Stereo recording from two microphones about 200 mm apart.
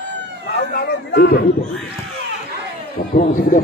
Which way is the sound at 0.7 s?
50° left (ahead or behind).